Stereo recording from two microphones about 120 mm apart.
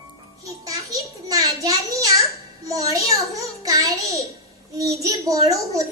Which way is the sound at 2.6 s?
30° right (ahead or behind).